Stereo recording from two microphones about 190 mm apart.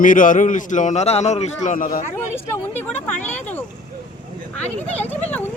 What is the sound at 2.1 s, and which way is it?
Speech, 10° left (ahead or behind).